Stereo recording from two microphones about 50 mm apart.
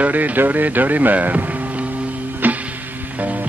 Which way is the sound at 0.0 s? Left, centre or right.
Right.